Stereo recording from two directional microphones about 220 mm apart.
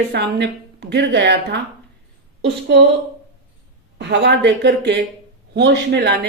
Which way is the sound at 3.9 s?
50° right (ahead or behind).